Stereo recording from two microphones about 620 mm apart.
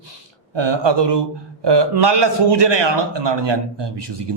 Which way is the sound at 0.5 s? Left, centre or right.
Right.